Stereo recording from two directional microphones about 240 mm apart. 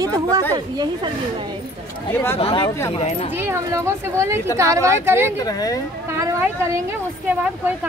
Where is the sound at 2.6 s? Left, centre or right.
Centre.